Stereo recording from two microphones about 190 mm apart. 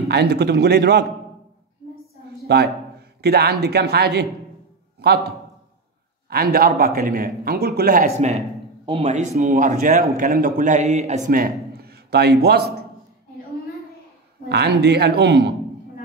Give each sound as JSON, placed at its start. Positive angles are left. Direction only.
{"t": 0.1, "sound": "speech", "side_deg": -60}
{"t": 2.4, "sound": "a sound", "side_deg": -60}
{"t": 3.6, "sound": "a man's voice", "side_deg": -60}
{"t": 6.3, "sound": "speech", "side_deg": -50}
{"t": 11.7, "sound": "a sound", "side_deg": -55}
{"t": 14.5, "sound": "speech", "side_deg": -60}